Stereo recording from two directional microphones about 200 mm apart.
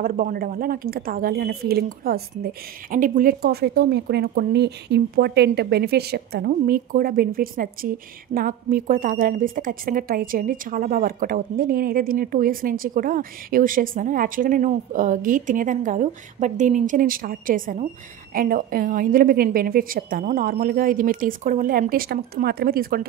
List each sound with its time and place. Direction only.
0.0 s a woman's voice: 45° right (ahead or behind)